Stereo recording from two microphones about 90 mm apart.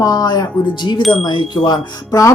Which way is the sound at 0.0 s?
45° left (ahead or behind).